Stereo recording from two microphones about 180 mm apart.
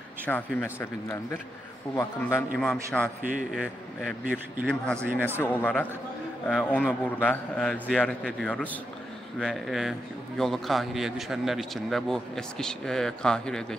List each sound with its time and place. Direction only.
0.3 s speech: 10° left (ahead or behind)
2.5 s a man's voice: centre (ahead or behind)
5.4 s a man's voice: 10° left (ahead or behind)